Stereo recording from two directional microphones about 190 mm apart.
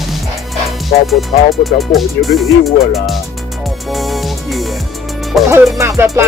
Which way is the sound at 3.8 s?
Centre (ahead or behind).